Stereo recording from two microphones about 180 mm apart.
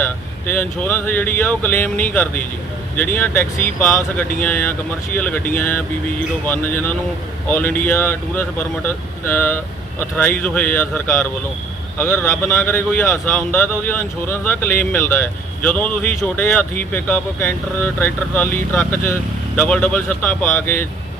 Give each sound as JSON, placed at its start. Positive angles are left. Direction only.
{"t": 0.0, "sound": "speech", "side_deg": 10}